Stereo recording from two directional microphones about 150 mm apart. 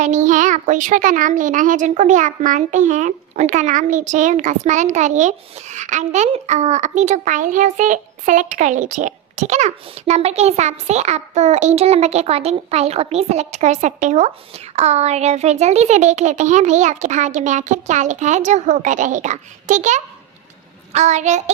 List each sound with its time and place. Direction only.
0.0 s a child's voice: 55° right (ahead or behind)